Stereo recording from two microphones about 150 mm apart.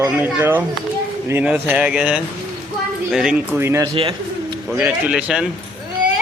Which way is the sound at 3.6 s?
20° right (ahead or behind).